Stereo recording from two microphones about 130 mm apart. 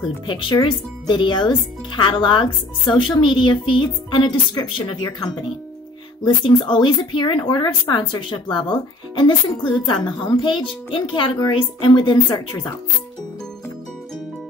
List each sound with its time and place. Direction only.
0.3 s speech: 40° left (ahead or behind)